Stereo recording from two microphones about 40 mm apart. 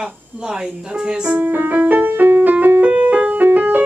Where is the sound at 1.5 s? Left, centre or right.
Right.